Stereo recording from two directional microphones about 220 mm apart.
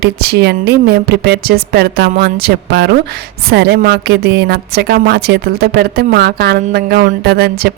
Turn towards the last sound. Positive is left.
turn(degrees=-45)  # may be behind; listen again after turning